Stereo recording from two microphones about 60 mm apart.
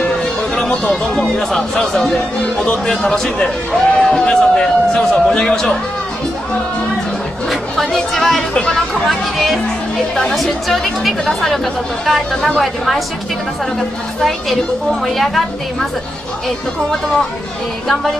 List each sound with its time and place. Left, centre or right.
0.6 s a man's voice: centre
7.7 s a woman's voice: centre
15.0 s a woman's voice: centre